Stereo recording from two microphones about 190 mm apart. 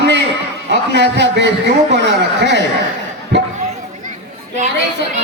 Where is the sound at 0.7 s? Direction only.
65° right (ahead or behind).